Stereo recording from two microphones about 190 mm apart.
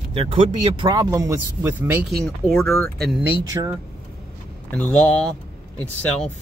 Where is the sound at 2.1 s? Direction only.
5° left (ahead or behind).